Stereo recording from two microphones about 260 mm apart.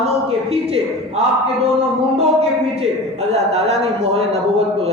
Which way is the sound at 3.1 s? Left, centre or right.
Right.